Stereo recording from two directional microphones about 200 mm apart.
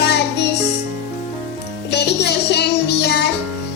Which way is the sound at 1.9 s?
55° left (ahead or behind).